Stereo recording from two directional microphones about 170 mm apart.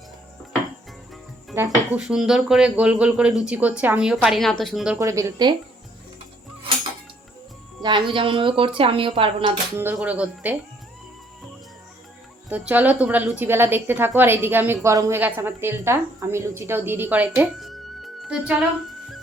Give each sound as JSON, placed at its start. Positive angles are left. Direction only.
{"t": 1.5, "sound": "a woman's voice", "side_deg": -15}
{"t": 2.0, "sound": "speech", "side_deg": -5}
{"t": 4.9, "sound": "speech", "side_deg": -20}
{"t": 7.8, "sound": "speech", "side_deg": -25}
{"t": 9.7, "sound": "a woman's voice", "side_deg": -10}
{"t": 12.5, "sound": "a woman's voice", "side_deg": -10}